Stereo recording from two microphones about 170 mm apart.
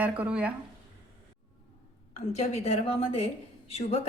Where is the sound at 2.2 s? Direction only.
40° left (ahead or behind).